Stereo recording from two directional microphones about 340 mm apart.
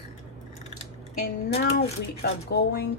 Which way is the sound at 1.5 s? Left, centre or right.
Left.